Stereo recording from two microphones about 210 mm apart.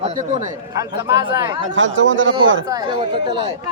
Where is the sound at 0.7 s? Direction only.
20° right (ahead or behind).